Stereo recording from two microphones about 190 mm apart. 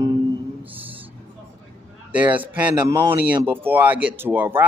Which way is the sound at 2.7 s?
20° right (ahead or behind).